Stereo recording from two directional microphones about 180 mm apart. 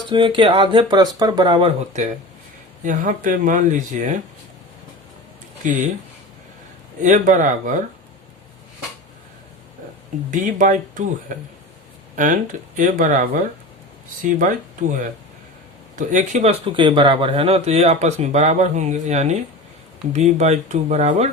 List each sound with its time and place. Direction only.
0.1 s speech: 25° right (ahead or behind)
2.8 s speech: 45° right (ahead or behind)
7.0 s speech: 45° right (ahead or behind)
10.3 s speech: 45° right (ahead or behind)
16.0 s speech: 45° right (ahead or behind)